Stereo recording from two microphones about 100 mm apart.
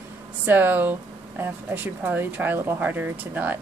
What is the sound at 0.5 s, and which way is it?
Speech, 20° right (ahead or behind).